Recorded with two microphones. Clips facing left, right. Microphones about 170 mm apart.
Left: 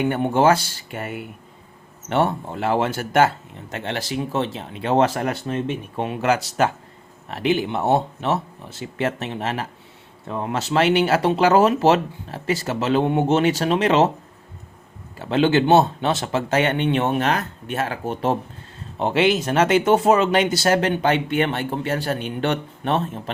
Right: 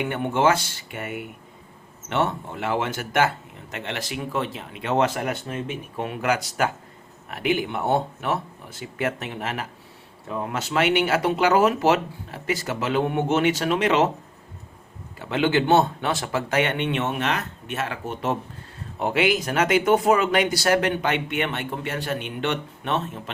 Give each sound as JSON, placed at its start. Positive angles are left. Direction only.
{"t": 0.0, "sound": "speech", "side_deg": 35}
{"t": 15.2, "sound": "speech", "side_deg": 30}